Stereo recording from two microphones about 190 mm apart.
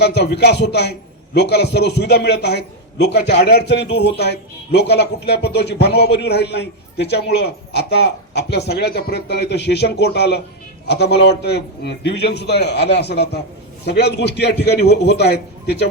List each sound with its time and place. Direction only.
0.0 s a man's voice: 60° left (ahead or behind)